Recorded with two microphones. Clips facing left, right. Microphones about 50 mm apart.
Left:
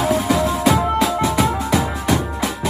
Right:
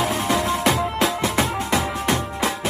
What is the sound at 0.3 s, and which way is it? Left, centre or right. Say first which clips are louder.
Music: left 1 dB; right.